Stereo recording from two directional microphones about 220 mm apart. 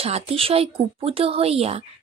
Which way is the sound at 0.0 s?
25° right (ahead or behind).